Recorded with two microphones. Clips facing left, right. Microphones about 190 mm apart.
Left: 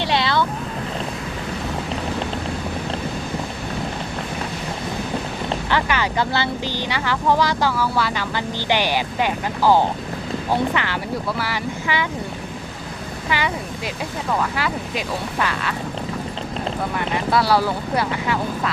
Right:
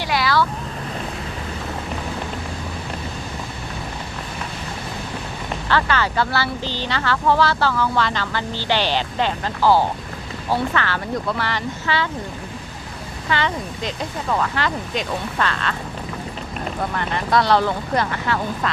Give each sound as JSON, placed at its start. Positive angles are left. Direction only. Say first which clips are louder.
{"t": 0.0, "sound": "vehicle", "louder": "even", "side_deg": 25}
{"t": 5.6, "sound": "speech", "louder": "right 3 dB", "side_deg": 15}
{"t": 13.3, "sound": "speech", "louder": "right 1 dB", "side_deg": 10}
{"t": 16.9, "sound": "speech", "louder": "even", "side_deg": 10}